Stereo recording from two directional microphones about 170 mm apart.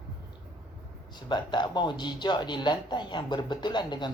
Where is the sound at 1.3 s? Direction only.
25° left (ahead or behind).